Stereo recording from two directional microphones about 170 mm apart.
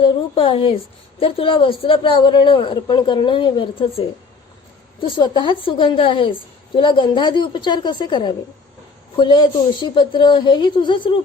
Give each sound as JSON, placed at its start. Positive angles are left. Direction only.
{"t": 0.0, "sound": "a woman's voice", "side_deg": 30}